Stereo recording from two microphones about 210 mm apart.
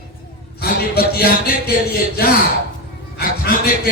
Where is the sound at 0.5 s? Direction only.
50° left (ahead or behind).